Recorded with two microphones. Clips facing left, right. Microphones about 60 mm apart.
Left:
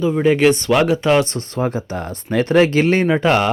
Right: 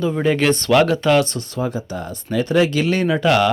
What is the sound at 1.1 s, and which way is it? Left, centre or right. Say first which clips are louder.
Speech: left 1 dB; left.